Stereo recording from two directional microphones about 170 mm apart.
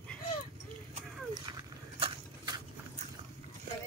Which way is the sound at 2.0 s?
35° right (ahead or behind).